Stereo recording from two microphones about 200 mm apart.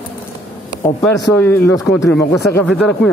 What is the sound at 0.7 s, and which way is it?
Speech, 15° left (ahead or behind).